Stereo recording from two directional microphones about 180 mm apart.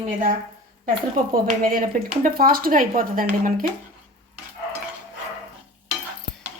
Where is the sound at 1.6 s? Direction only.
50° right (ahead or behind).